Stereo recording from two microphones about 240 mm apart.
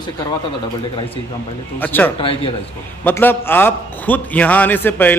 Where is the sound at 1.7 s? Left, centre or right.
Centre.